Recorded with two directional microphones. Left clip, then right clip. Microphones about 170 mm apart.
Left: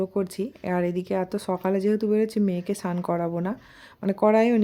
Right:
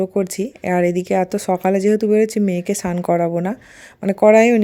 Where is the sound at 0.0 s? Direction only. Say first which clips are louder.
Right 7 dB; 20° right (ahead or behind).